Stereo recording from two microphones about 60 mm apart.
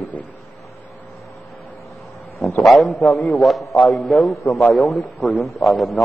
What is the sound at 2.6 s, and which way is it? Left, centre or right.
A man's voice, centre.